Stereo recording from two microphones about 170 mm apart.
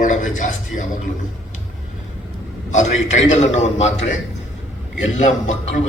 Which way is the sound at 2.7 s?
45° left (ahead or behind).